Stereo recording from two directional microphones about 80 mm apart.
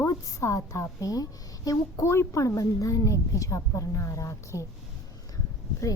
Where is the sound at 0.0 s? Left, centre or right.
Left.